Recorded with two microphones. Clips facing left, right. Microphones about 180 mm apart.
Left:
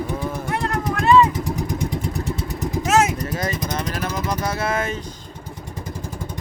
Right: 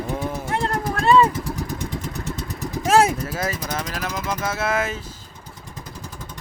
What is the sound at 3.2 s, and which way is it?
Vehicle, 5° right (ahead or behind).